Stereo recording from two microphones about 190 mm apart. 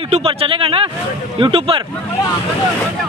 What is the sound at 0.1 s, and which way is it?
Speech, 30° right (ahead or behind).